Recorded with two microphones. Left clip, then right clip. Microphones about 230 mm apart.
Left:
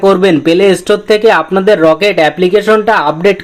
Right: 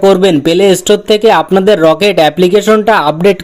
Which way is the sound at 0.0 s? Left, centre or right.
Right.